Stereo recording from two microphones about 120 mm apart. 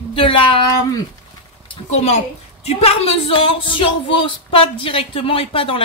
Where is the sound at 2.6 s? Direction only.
60° left (ahead or behind).